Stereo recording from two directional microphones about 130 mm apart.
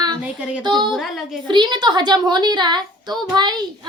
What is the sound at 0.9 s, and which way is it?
Speech, centre (ahead or behind).